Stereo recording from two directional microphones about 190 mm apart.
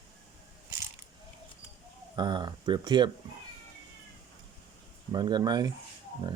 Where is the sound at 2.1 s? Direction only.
25° right (ahead or behind).